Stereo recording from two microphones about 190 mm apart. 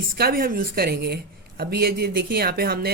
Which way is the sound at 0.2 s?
50° right (ahead or behind).